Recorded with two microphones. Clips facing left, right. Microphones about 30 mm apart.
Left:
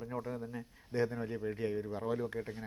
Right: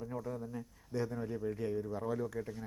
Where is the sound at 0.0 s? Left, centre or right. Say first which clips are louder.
Left 1 dB; left.